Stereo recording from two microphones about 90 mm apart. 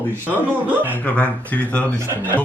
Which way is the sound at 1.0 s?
15° left (ahead or behind).